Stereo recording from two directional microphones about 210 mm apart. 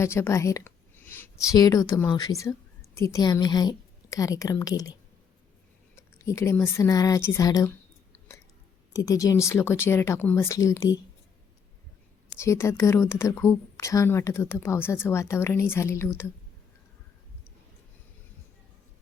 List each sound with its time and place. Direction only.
0.0 s a woman's voice: 10° left (ahead or behind)
6.0 s a woman's voice: 15° left (ahead or behind)
8.9 s a woman's voice: 15° left (ahead or behind)
12.4 s a woman's voice: 15° left (ahead or behind)